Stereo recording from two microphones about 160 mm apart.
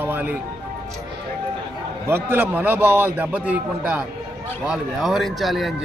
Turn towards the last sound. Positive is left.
turn(degrees=0)  # may be behind; listen again after turning